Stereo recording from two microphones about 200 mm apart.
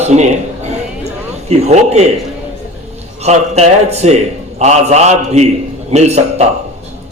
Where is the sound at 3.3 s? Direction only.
35° right (ahead or behind).